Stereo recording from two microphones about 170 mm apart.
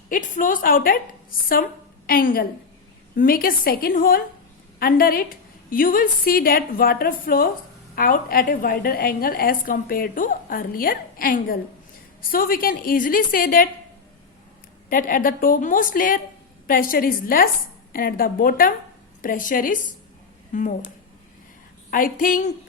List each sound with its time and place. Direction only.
0.1 s a woman's voice: 50° left (ahead or behind)
2.0 s a woman's voice: 60° left (ahead or behind)
14.8 s a woman's voice: 55° left (ahead or behind)
21.8 s a woman's voice: 55° left (ahead or behind)